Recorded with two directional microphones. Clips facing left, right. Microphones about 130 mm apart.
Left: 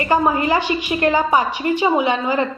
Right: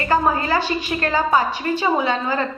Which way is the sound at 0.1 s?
15° left (ahead or behind).